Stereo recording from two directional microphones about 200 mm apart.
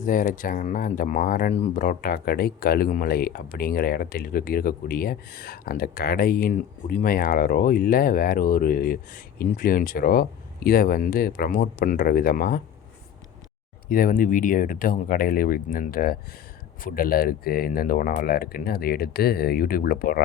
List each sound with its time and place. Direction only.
0.0 s speech: 40° left (ahead or behind)
13.8 s speech: 45° left (ahead or behind)